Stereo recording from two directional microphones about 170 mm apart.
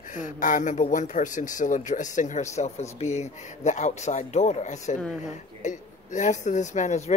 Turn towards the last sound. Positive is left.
turn(degrees=45)  # may be behind; listen again after turning